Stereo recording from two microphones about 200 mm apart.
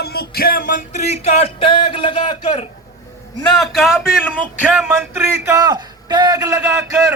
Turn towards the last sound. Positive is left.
turn(degrees=-15)  # may be behind; listen again after turning